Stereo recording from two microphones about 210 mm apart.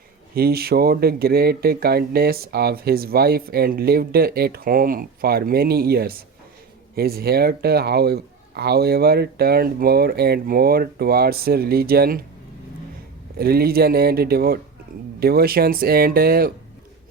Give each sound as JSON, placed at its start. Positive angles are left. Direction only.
{"t": 0.3, "sound": "speech", "side_deg": -45}
{"t": 13.4, "sound": "speech", "side_deg": -45}